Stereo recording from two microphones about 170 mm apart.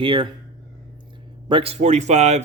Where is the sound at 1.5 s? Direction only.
35° right (ahead or behind).